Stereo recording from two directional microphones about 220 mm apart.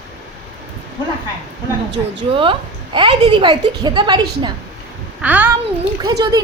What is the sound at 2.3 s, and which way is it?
A woman's voice, 25° right (ahead or behind).